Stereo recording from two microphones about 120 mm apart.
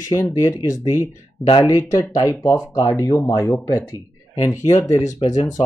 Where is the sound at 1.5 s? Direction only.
30° left (ahead or behind).